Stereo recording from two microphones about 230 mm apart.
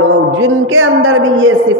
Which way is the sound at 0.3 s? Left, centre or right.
Right.